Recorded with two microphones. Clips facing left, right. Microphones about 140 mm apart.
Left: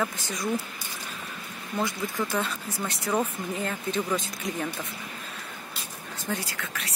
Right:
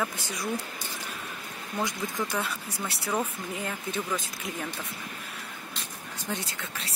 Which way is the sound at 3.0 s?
10° left (ahead or behind).